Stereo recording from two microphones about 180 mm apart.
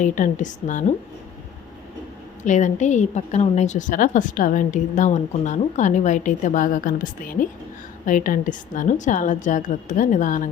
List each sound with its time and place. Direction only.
0.0 s a woman's voice: 45° left (ahead or behind)
2.4 s a woman's voice: 45° left (ahead or behind)